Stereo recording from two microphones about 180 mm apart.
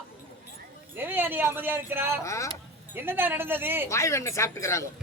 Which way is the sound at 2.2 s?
15° left (ahead or behind).